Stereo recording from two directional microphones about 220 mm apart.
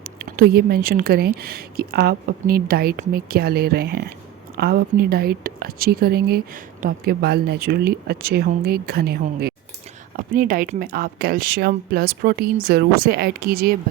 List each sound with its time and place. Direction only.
0.0 s speech: 40° right (ahead or behind)